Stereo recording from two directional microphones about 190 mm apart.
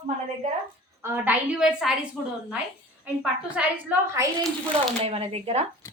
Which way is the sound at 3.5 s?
10° right (ahead or behind).